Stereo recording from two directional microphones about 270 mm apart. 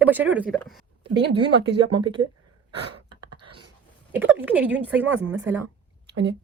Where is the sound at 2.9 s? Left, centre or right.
Centre.